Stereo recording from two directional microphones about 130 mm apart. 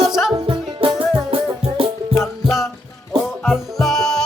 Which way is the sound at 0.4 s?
40° right (ahead or behind).